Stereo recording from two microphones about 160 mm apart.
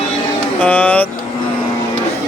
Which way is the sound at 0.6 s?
10° left (ahead or behind).